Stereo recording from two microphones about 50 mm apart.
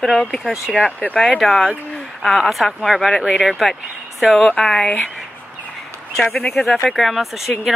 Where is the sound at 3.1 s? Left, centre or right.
Centre.